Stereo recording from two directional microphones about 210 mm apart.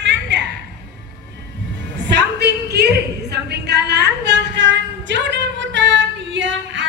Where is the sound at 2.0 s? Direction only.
55° right (ahead or behind).